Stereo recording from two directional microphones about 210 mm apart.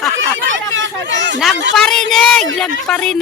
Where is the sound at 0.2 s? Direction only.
65° right (ahead or behind).